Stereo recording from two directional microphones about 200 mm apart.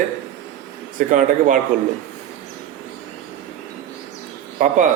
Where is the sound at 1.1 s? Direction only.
40° right (ahead or behind).